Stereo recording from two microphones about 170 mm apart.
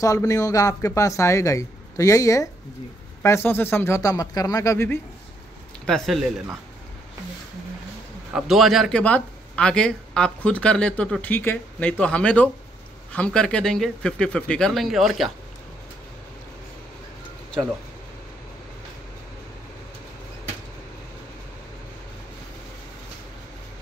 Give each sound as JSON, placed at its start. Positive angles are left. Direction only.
{"t": 0.0, "sound": "speech", "side_deg": 20}
{"t": 5.9, "sound": "speech", "side_deg": 0}
{"t": 8.3, "sound": "speech", "side_deg": -5}